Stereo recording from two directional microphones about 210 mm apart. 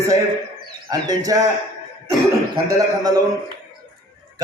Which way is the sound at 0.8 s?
20° right (ahead or behind).